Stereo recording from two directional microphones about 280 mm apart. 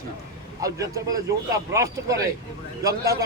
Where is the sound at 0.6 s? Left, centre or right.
Centre.